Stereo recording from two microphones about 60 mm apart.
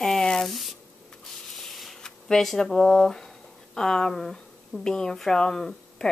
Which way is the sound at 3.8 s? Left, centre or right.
Centre.